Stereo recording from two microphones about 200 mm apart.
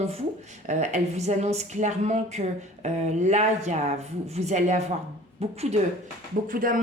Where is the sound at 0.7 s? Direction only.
35° right (ahead or behind).